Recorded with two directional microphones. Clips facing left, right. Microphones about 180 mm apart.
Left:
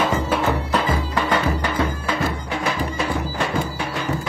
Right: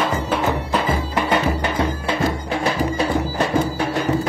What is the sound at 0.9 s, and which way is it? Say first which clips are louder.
Music: right 1 dB; 25° right (ahead or behind).